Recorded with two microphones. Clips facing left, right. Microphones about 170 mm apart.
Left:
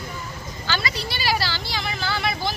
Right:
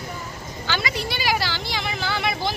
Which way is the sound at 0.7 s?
20° right (ahead or behind).